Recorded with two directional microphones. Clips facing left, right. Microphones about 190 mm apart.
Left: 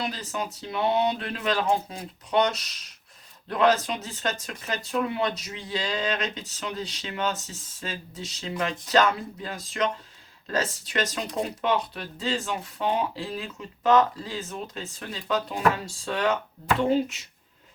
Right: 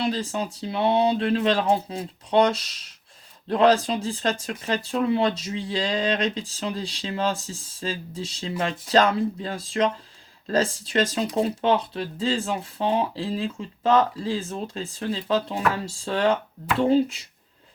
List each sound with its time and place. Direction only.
0.0 s speech: 30° right (ahead or behind)